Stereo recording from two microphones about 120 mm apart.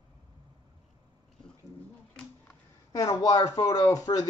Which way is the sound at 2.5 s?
25° left (ahead or behind).